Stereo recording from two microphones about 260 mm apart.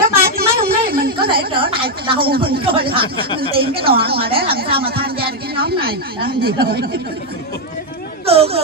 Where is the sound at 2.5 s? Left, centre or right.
Centre.